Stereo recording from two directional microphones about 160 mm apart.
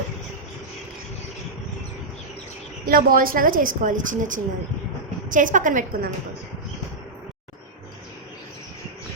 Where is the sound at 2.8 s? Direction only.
65° right (ahead or behind).